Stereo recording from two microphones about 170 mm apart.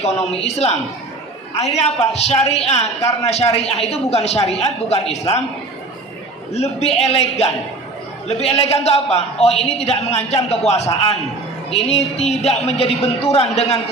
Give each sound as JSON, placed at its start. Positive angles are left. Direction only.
{"t": 0.0, "sound": "a man's voice", "side_deg": 40}
{"t": 6.5, "sound": "a man's voice", "side_deg": 40}